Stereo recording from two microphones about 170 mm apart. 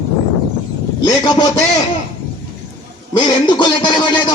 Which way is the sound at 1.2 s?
25° left (ahead or behind).